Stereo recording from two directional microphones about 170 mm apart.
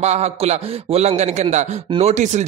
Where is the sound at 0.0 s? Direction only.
40° right (ahead or behind).